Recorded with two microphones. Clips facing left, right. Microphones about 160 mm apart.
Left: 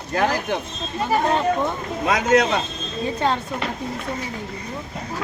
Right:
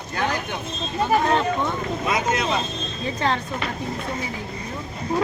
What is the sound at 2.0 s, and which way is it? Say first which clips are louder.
Speech: left 7 dB; 90° left.